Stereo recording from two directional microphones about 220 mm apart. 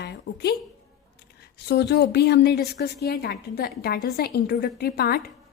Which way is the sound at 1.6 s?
50° left (ahead or behind).